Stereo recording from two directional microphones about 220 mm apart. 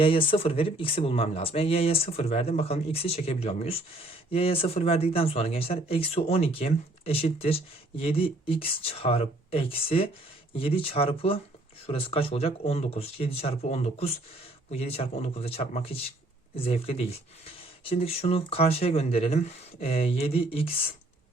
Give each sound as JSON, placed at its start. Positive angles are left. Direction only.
{"t": 0.0, "sound": "speech", "side_deg": 25}